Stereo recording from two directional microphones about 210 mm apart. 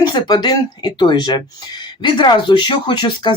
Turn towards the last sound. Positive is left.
turn(degrees=20)  # may be behind; listen again after turning